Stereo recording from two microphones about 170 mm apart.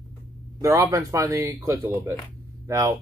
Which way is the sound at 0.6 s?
20° right (ahead or behind).